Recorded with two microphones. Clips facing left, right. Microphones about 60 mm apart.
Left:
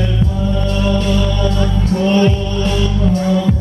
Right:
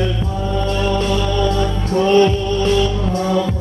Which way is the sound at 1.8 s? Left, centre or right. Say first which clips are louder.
Right 2 dB; right.